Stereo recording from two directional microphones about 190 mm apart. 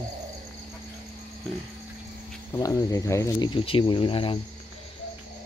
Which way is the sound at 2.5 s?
20° left (ahead or behind).